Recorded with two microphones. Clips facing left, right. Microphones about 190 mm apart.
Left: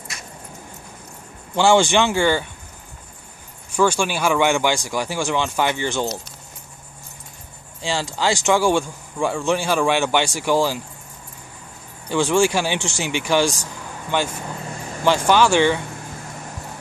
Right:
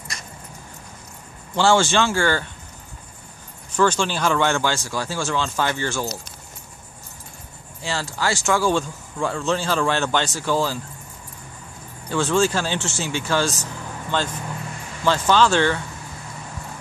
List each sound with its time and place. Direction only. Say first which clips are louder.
1.5 s speech: left 2 dB; 15° left (ahead or behind)
3.7 s speech: left 1 dB; 10° left (ahead or behind)
7.8 s speech: left 3 dB; 15° left (ahead or behind)
12.1 s speech: left 2 dB; 15° left (ahead or behind)